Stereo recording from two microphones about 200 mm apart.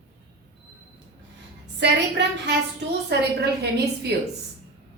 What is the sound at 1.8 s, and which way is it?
A woman's voice, 60° right (ahead or behind).